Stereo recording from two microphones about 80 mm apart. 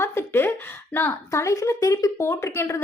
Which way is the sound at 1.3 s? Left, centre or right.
Left.